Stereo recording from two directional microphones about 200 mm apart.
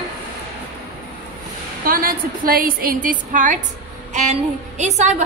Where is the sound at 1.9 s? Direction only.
45° right (ahead or behind).